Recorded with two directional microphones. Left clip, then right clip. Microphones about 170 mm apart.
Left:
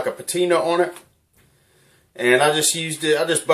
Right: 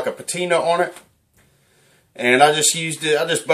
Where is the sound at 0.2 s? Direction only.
30° left (ahead or behind).